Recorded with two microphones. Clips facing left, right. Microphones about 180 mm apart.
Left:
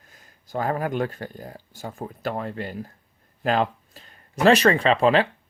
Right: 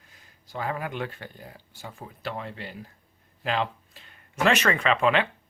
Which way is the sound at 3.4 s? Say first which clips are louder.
Left 5 dB; 45° left (ahead or behind).